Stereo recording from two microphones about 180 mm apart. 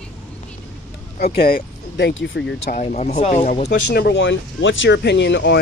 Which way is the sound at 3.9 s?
65° left (ahead or behind).